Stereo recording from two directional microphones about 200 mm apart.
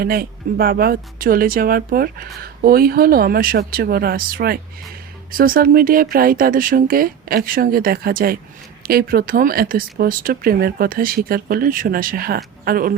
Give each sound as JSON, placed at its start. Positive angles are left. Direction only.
{"t": 0.0, "sound": "speech", "side_deg": -50}